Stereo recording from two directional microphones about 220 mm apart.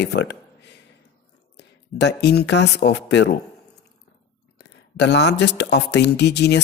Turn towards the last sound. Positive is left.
turn(degrees=50)  # may be behind; listen again after turning